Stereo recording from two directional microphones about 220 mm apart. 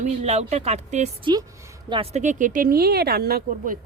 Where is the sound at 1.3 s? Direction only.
20° right (ahead or behind).